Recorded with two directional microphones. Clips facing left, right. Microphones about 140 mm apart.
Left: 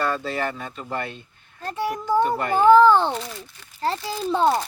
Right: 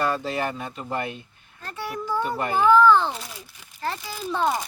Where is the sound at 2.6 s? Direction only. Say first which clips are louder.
Left 3 dB; 35° left (ahead or behind).